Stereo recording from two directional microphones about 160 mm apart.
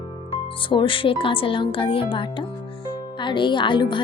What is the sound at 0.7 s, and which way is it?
Speech, 30° left (ahead or behind).